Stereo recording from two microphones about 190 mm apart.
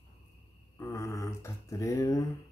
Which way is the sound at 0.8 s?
15° left (ahead or behind).